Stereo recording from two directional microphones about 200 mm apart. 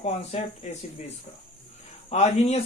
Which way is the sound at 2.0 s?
35° left (ahead or behind).